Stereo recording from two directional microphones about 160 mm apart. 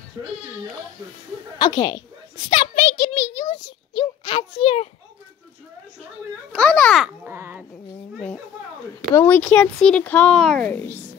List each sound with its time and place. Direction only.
0.2 s speech: 25° right (ahead or behind)
1.6 s a child's voice: 25° left (ahead or behind)
6.5 s a child's voice: 5° left (ahead or behind)
7.2 s speech: 15° right (ahead or behind)
9.1 s speech: 15° left (ahead or behind)